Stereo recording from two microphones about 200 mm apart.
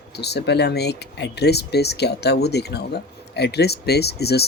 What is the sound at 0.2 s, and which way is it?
Speech, 55° left (ahead or behind).